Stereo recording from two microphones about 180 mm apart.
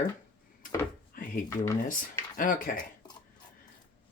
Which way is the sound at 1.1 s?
50° left (ahead or behind).